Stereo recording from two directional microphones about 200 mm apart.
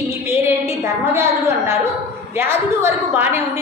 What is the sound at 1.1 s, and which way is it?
A woman's voice, 15° right (ahead or behind).